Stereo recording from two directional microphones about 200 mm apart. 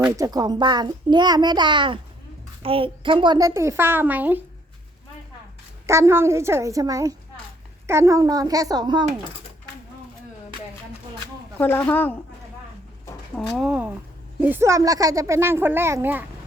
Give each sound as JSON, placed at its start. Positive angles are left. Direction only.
{"t": 0.0, "sound": "a child's voice", "side_deg": -20}
{"t": 5.8, "sound": "a child's voice", "side_deg": -15}
{"t": 11.5, "sound": "speech", "side_deg": 10}
{"t": 13.3, "sound": "a child's voice", "side_deg": 0}